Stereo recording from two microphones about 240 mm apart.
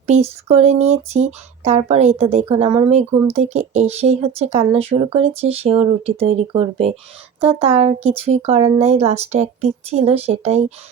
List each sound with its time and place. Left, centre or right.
0.1 s speech: right